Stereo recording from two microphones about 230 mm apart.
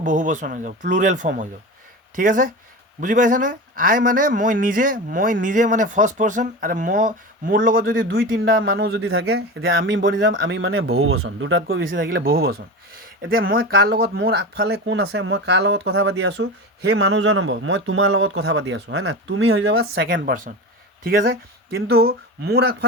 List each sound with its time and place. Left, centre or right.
0.0 s a man's voice: right
8.1 s a man's voice: right
8.4 s a man's voice: right
9.0 s a man's voice: right
11.8 s a man's voice: right
20.1 s a man's voice: right